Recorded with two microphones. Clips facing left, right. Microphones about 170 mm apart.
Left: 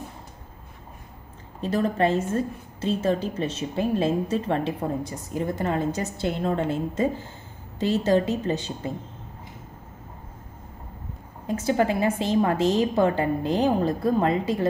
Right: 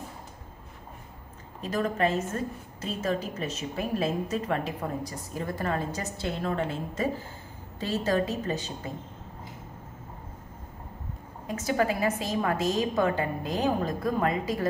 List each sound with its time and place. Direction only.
1.6 s a woman's voice: 30° left (ahead or behind)
11.4 s a woman's voice: 30° left (ahead or behind)